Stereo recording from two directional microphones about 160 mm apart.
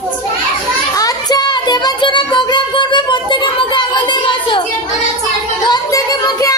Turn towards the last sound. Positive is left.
turn(degrees=25)  # may be behind; listen again after turning